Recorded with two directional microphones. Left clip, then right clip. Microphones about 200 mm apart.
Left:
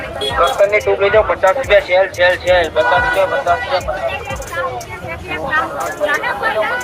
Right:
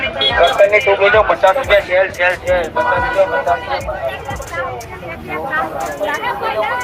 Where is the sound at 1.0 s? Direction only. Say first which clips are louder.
Even; 50° left (ahead or behind).